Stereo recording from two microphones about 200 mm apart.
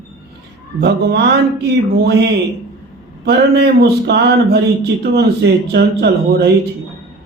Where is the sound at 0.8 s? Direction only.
55° right (ahead or behind).